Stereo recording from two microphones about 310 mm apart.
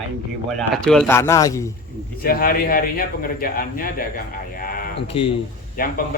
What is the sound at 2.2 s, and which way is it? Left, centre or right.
A man's voice, left.